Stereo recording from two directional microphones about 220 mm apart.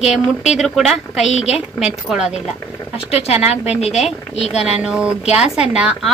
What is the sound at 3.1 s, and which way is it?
Speech, 30° left (ahead or behind).